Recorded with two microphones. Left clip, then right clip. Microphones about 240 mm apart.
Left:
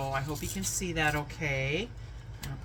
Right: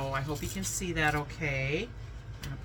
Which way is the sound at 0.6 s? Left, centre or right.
Centre.